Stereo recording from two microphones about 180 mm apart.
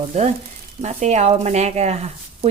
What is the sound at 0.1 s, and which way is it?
Speech, 40° right (ahead or behind).